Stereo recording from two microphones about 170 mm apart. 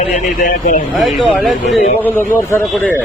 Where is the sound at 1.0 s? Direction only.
Centre (ahead or behind).